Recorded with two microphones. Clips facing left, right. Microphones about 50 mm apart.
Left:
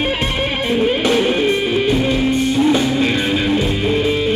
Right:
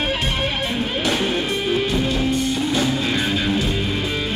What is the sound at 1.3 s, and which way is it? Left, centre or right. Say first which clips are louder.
Music: left 5 dB; left.